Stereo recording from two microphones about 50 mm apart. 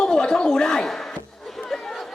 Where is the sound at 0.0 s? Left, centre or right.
Centre.